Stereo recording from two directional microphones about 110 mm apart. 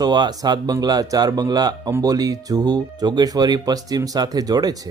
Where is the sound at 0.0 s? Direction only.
40° right (ahead or behind).